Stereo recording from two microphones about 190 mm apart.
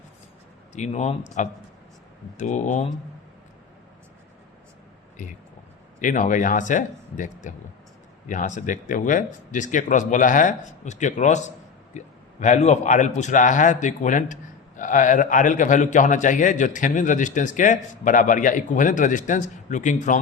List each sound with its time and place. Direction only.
0.7 s speech: 40° left (ahead or behind)
6.0 s a man's voice: 40° left (ahead or behind)